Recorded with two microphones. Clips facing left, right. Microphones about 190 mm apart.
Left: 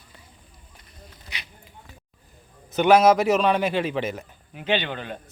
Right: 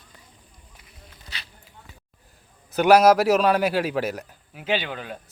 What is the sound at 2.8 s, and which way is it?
Speech, 5° right (ahead or behind).